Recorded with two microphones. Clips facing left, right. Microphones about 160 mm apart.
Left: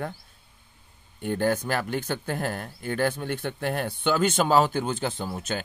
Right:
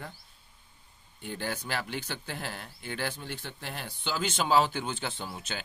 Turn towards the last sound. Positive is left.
turn(degrees=45)  # may be behind; listen again after turning